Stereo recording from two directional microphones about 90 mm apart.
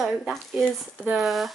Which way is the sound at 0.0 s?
Centre (ahead or behind).